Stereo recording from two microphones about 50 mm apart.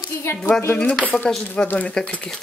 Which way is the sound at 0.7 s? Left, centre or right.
Left.